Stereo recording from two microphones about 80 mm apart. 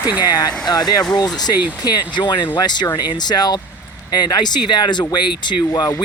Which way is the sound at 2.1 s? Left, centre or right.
Left.